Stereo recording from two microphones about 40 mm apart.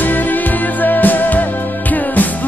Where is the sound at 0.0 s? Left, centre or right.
Left.